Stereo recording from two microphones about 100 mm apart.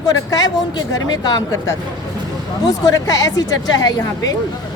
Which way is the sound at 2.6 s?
35° left (ahead or behind).